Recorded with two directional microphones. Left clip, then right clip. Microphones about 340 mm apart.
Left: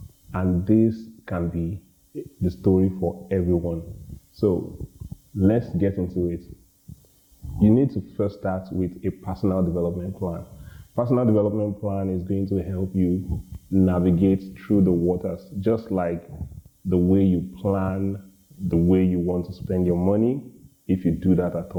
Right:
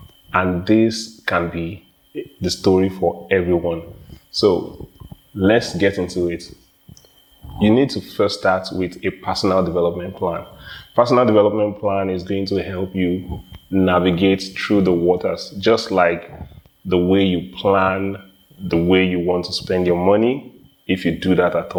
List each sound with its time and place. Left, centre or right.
0.3 s speech: centre
3.0 s speech: centre
3.2 s speech: centre
7.6 s speech: centre